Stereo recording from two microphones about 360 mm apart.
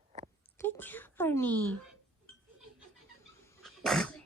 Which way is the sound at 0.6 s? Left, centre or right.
Centre.